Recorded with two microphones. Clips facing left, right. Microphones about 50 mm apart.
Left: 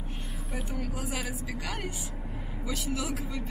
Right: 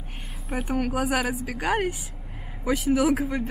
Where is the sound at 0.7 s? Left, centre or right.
Right.